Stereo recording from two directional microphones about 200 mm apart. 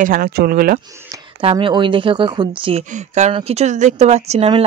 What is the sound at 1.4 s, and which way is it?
Speech, 25° right (ahead or behind).